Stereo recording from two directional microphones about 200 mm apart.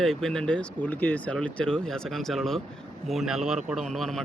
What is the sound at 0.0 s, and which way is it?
Speech, centre (ahead or behind).